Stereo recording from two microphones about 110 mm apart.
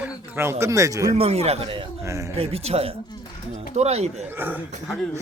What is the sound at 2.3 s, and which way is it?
Speech, 65° right (ahead or behind).